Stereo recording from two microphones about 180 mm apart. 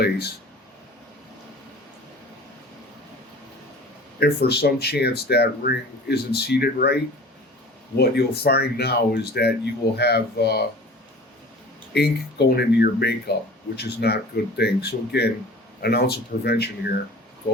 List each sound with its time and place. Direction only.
0.0 s speech: 65° left (ahead or behind)
4.2 s speech: 65° left (ahead or behind)
7.9 s speech: 65° left (ahead or behind)
11.9 s speech: 65° left (ahead or behind)